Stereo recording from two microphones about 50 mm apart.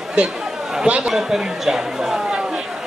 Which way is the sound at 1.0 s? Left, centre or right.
Centre.